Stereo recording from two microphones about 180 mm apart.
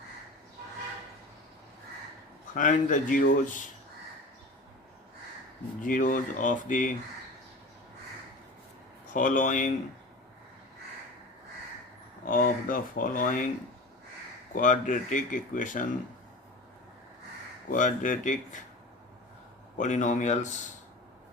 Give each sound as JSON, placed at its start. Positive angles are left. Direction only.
{"t": 2.6, "sound": "speech", "side_deg": 45}
{"t": 5.8, "sound": "speech", "side_deg": 45}
{"t": 9.1, "sound": "speech", "side_deg": 45}
{"t": 12.2, "sound": "speech", "side_deg": 50}
{"t": 14.5, "sound": "speech", "side_deg": 45}
{"t": 17.7, "sound": "speech", "side_deg": 45}
{"t": 19.8, "sound": "speech", "side_deg": 45}